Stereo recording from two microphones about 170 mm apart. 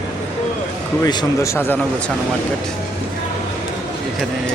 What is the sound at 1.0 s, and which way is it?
Speech, 20° left (ahead or behind).